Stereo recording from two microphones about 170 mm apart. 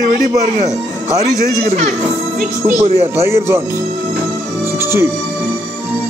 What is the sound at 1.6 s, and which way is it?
Speech, 40° right (ahead or behind).